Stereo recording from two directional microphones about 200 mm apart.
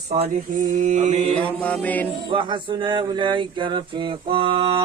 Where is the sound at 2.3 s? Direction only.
25° right (ahead or behind).